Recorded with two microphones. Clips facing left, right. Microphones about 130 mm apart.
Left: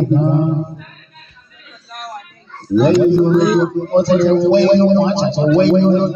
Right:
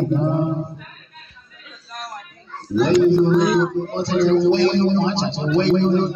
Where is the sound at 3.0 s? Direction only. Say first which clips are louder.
Left 3 dB; 10° left (ahead or behind).